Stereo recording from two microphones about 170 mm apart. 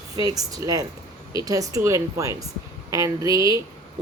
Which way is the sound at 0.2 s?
20° right (ahead or behind).